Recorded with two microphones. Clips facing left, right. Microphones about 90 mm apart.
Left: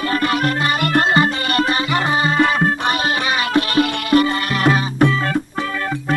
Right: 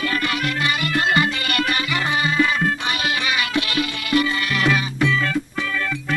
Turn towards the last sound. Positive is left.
turn(degrees=40)  # may be behind; listen again after turning